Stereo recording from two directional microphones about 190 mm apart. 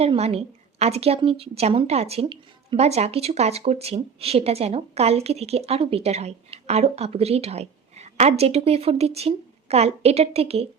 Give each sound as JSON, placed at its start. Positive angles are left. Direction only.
{"t": 0.0, "sound": "a woman's voice", "side_deg": -30}